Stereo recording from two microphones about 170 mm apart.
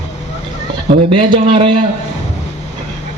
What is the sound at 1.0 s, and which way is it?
Speech, 30° right (ahead or behind).